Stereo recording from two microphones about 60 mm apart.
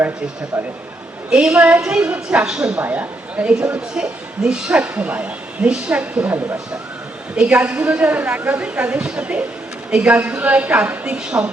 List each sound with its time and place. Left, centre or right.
0.5 s a woman's voice: centre
1.8 s a woman's voice: centre
2.0 s a woman's voice: right
2.8 s a woman's voice: right
7.3 s a woman's voice: centre